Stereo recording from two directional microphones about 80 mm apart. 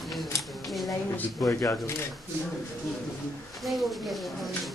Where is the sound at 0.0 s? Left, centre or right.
Centre.